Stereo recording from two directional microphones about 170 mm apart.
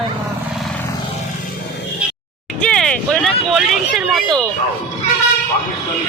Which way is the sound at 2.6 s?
5° left (ahead or behind).